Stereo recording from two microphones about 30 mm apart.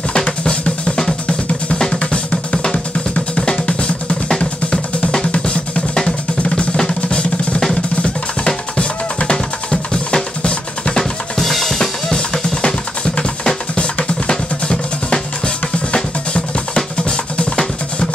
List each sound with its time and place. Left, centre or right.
0.1 s drum: left
1.8 s drum: left
3.3 s drum: left
3.6 s drum: left
6.9 s drum: left
9.3 s drum: left
11.3 s drum kit: centre
12.6 s music: left
14.2 s drum: left